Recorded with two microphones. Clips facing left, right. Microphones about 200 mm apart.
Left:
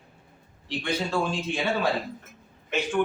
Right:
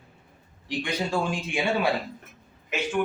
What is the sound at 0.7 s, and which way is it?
A man's voice, 15° right (ahead or behind).